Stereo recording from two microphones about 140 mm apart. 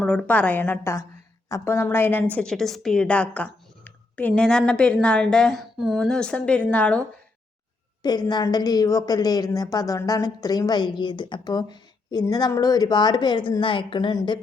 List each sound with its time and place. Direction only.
0.0 s a woman's voice: 5° left (ahead or behind)
8.0 s a woman's voice: 30° left (ahead or behind)